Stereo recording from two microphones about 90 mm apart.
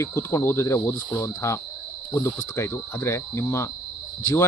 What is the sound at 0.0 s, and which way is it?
Speech, 30° left (ahead or behind).